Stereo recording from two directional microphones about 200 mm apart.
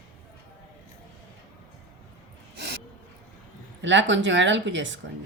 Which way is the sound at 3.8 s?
65° right (ahead or behind).